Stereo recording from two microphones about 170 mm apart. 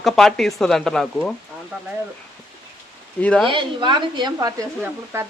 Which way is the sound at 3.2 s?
5° left (ahead or behind).